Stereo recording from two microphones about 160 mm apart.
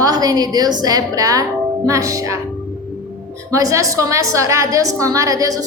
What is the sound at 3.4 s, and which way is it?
A woman's voice, 20° right (ahead or behind).